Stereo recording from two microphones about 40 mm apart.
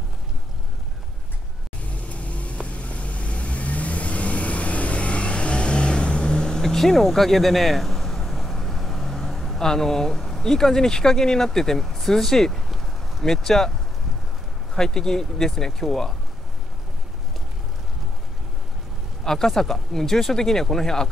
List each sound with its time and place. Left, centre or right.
2.0 s vehicle: left; by 11.8 s centre
11.8 s speech: centre
14.8 s speech: centre
19.2 s speech: centre